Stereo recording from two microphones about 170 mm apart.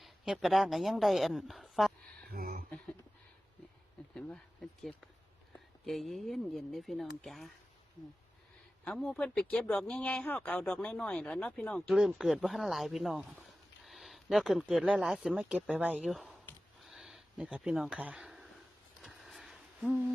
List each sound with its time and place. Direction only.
0.0 s a woman's voice: centre (ahead or behind)
2.3 s a sound: 55° right (ahead or behind)
2.6 s speech: 5° left (ahead or behind)
4.1 s speech: centre (ahead or behind)
8.8 s speech: 5° left (ahead or behind)
16.8 s a sound: centre (ahead or behind)